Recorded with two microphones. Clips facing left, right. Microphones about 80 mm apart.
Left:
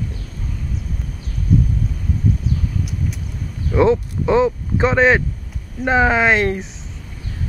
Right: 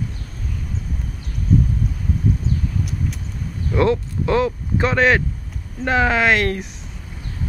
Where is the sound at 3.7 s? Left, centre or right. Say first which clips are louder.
Left 3 dB; centre.